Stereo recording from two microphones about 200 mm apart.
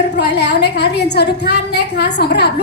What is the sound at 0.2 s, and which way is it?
A woman's voice, 55° left (ahead or behind).